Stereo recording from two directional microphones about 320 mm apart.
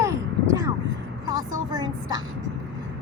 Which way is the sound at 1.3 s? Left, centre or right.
Right.